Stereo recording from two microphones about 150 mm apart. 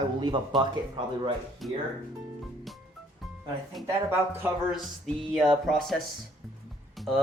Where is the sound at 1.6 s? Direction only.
Centre (ahead or behind).